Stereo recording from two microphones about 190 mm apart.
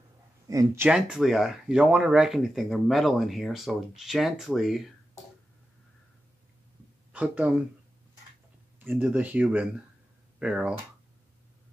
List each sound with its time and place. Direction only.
0.5 s speech: 20° right (ahead or behind)
0.8 s speech: 5° right (ahead or behind)
7.1 s speech: 5° right (ahead or behind)
8.7 s speech: 10° right (ahead or behind)